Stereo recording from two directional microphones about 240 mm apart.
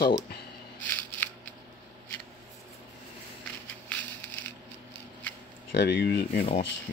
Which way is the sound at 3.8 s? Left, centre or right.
Centre.